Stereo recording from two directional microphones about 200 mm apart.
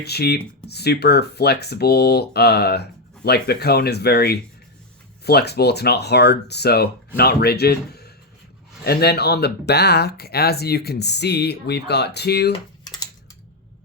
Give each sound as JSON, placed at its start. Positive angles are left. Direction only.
{"t": 0.0, "sound": "speech", "side_deg": 55}